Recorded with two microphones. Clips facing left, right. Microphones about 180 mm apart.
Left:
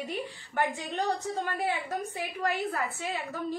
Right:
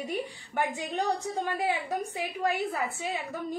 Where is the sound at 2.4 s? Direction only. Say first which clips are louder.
Right 1 dB; 15° right (ahead or behind).